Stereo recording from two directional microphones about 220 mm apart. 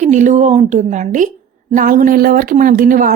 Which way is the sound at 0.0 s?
35° right (ahead or behind).